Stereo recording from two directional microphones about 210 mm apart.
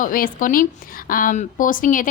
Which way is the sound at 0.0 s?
40° left (ahead or behind).